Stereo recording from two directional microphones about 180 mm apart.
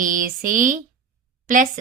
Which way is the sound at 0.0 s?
50° right (ahead or behind).